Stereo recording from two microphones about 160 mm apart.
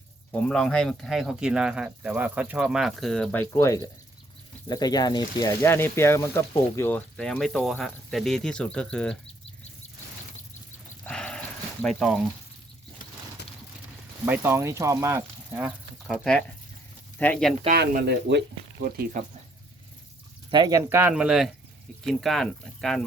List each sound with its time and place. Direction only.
0.3 s speech: 5° left (ahead or behind)
3.4 s speech: 20° left (ahead or behind)
11.0 s a sound: 5° left (ahead or behind)
14.3 s speech: 15° right (ahead or behind)
15.6 s speech: centre (ahead or behind)
17.7 s speech: 90° right
20.5 s speech: 25° right (ahead or behind); by 23.0 s centre (ahead or behind)